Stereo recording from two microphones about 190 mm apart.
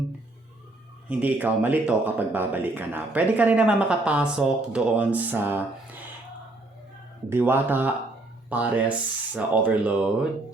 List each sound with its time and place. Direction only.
1.0 s speech: 10° right (ahead or behind)
7.3 s speech: 10° right (ahead or behind)